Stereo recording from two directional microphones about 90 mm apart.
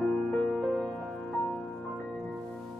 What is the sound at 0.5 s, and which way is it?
Music, centre (ahead or behind).